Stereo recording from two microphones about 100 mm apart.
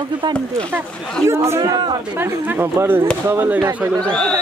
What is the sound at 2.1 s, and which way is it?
Speech, 20° right (ahead or behind).